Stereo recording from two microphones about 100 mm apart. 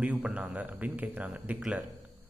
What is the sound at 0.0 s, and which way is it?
A man's voice, 15° right (ahead or behind).